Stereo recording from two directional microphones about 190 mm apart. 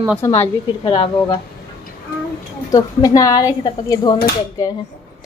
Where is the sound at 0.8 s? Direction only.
25° left (ahead or behind).